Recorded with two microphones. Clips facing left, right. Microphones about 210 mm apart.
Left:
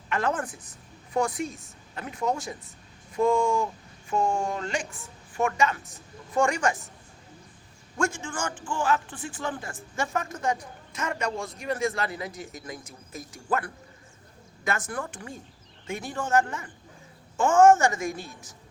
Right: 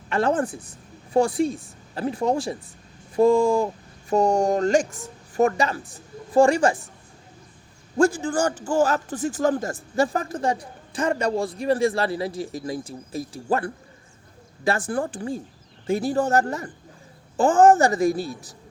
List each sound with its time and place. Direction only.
0.1 s a man's voice: 30° right (ahead or behind)
7.9 s a man's voice: 35° right (ahead or behind)